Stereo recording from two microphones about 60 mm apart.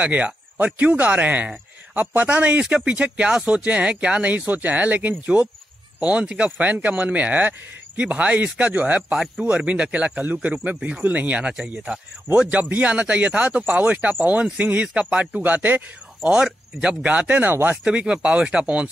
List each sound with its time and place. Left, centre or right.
0.0 s speech: right
15.4 s speech: right
16.4 s speech: centre; by 17.7 s right
17.8 s speech: centre